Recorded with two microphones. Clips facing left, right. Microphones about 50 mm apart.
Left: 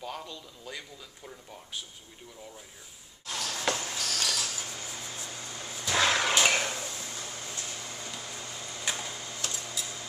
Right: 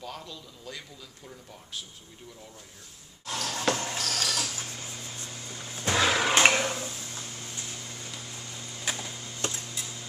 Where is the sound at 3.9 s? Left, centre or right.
Right.